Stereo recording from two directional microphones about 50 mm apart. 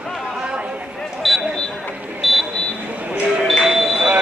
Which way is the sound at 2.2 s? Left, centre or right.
Centre.